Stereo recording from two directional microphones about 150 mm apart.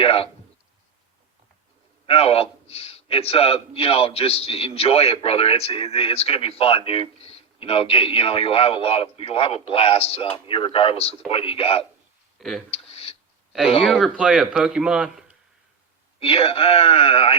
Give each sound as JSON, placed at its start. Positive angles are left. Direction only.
{"t": 0.0, "sound": "a sound", "side_deg": 40}
{"t": 2.0, "sound": "a man's voice", "side_deg": 40}
{"t": 12.4, "sound": "speech", "side_deg": 0}
{"t": 12.7, "sound": "a sound", "side_deg": 40}
{"t": 13.9, "sound": "speech", "side_deg": -5}
{"t": 16.2, "sound": "a man's voice", "side_deg": 40}